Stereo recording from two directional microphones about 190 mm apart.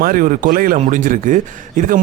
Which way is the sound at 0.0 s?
45° right (ahead or behind).